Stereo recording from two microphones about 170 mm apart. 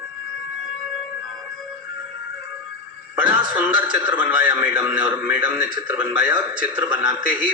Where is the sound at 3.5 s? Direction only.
5° right (ahead or behind).